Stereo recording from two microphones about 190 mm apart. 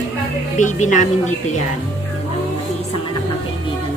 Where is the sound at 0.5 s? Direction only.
40° left (ahead or behind).